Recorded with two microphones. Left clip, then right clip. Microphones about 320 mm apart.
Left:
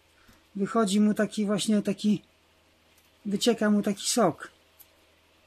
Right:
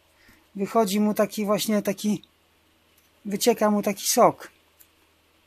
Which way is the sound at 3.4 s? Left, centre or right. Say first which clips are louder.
Right 4 dB; centre.